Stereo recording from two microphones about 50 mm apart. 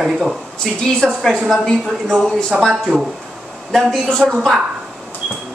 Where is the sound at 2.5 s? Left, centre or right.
Right.